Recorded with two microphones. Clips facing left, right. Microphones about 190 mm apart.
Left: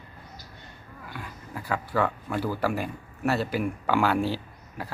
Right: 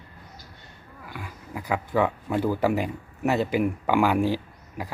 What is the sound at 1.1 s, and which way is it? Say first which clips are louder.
Speech: right 1 dB; 10° right (ahead or behind).